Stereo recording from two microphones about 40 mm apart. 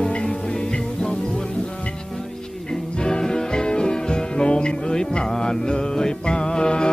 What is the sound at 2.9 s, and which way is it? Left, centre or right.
Music, left.